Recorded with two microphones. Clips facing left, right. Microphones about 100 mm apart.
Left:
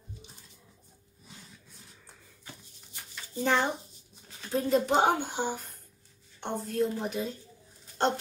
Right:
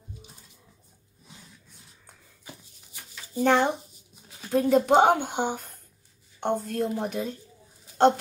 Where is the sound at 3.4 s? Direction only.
50° right (ahead or behind).